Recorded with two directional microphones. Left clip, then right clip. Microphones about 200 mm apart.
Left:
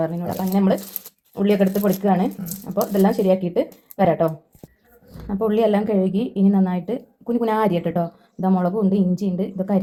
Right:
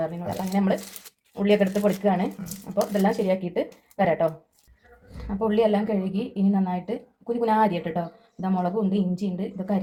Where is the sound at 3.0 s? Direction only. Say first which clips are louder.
Left 5 dB; 35° left (ahead or behind).